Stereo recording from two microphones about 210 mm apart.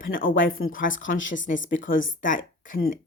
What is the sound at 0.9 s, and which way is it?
Speech, 65° left (ahead or behind).